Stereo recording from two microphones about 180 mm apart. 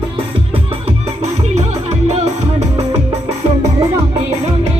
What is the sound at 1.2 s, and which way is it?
Music, 35° right (ahead or behind).